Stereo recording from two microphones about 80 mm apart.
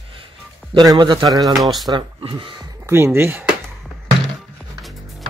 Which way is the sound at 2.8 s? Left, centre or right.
Right.